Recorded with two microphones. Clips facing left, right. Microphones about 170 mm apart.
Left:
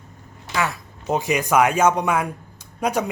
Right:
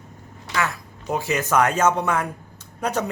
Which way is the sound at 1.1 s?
15° left (ahead or behind).